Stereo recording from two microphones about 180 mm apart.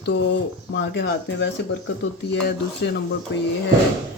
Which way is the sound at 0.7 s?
75° left (ahead or behind).